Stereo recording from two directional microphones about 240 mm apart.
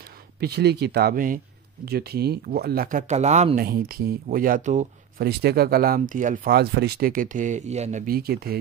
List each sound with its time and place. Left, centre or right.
0.4 s speech: right